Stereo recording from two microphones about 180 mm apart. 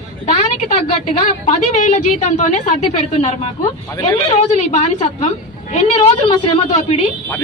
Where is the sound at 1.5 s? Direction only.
40° left (ahead or behind).